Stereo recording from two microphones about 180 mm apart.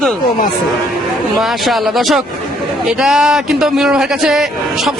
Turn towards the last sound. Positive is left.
turn(degrees=-5)  # may be behind; listen again after turning